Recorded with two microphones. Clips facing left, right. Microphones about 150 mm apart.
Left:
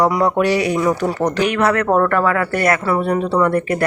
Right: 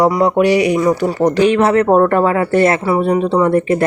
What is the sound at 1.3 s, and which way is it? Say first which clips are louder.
Speech: right 7 dB; 25° right (ahead or behind).